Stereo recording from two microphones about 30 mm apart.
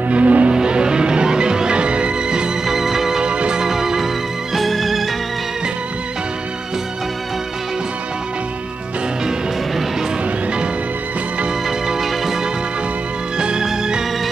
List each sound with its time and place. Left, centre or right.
0.1 s music: right
0.5 s music: right
2.6 s music: centre
3.2 s music: right
3.6 s music: centre
4.6 s music: centre
13.4 s music: right